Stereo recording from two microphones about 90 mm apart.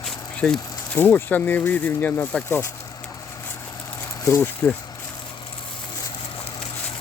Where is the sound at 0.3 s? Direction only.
10° left (ahead or behind).